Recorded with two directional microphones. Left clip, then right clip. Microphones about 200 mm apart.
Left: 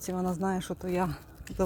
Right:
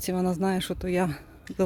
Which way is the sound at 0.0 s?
30° right (ahead or behind).